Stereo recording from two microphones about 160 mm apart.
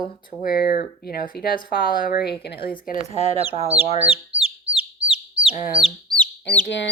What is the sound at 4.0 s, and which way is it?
Speech, 40° right (ahead or behind).